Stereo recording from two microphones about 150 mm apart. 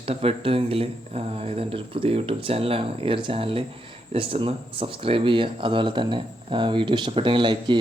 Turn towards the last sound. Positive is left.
turn(degrees=-30)  # may be behind; listen again after turning